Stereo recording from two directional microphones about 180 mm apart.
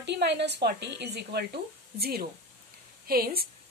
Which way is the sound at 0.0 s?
70° right (ahead or behind).